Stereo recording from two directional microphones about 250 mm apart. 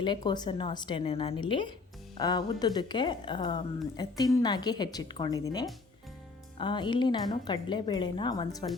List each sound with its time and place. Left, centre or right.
0.0 s a woman's voice: centre